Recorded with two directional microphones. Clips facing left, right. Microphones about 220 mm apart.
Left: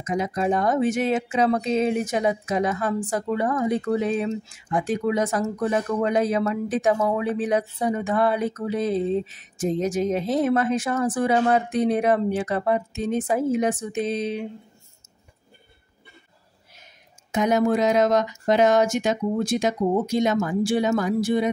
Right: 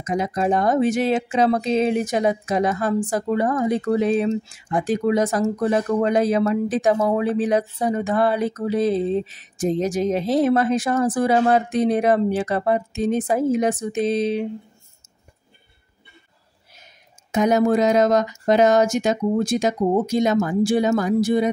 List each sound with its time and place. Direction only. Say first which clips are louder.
0.0 s speech: right 2 dB; 35° right (ahead or behind)
17.3 s speech: right 3 dB; 40° right (ahead or behind)